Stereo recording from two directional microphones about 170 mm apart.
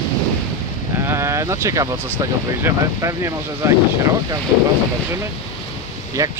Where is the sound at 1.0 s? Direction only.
15° right (ahead or behind).